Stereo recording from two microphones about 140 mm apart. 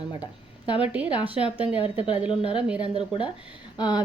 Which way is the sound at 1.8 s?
40° left (ahead or behind).